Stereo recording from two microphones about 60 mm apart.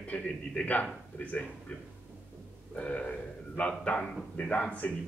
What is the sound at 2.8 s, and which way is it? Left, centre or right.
A man's voice, left.